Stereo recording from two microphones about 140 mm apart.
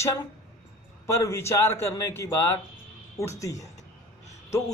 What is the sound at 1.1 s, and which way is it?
Speech, 20° left (ahead or behind).